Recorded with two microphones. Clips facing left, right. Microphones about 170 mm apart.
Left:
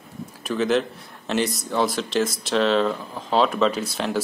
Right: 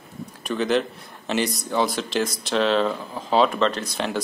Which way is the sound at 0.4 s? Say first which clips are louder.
Left 1 dB; centre (ahead or behind).